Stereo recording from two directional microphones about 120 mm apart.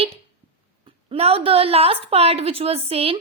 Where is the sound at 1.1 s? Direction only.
55° right (ahead or behind).